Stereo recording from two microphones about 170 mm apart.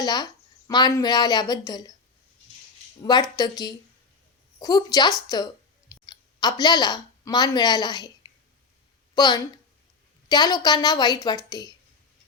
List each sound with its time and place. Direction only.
0.0 s a woman's voice: 25° left (ahead or behind)
3.0 s a woman's voice: 25° left (ahead or behind)